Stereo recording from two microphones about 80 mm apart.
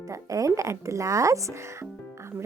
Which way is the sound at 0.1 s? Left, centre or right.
Right.